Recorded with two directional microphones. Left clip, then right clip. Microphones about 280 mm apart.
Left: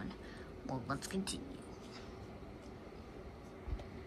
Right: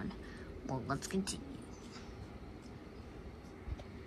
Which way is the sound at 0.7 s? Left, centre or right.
Centre.